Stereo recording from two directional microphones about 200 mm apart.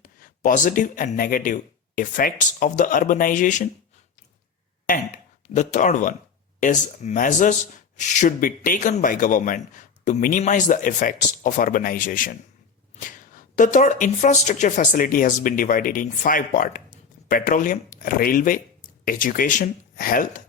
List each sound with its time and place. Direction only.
0.0 s speech: 40° left (ahead or behind)
4.9 s speech: 40° left (ahead or behind)